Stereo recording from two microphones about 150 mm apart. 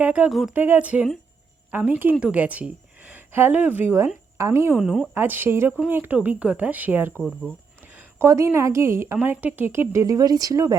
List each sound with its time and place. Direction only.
0.0 s speech: 10° right (ahead or behind)
0.5 s a woman's voice: 10° right (ahead or behind)
4.8 s a woman's voice: 5° right (ahead or behind)
7.2 s speech: centre (ahead or behind)
7.9 s a woman's voice: 20° right (ahead or behind)